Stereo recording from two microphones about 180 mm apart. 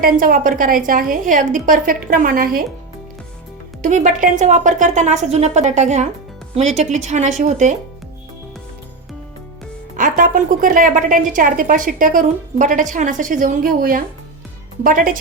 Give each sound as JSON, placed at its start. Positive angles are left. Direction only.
{"t": 0.0, "sound": "a woman's voice", "side_deg": -50}
{"t": 3.8, "sound": "a woman's voice", "side_deg": -45}
{"t": 10.0, "sound": "a woman's voice", "side_deg": -50}